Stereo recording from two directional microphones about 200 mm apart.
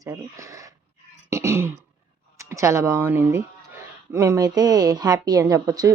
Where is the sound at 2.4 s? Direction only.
15° right (ahead or behind).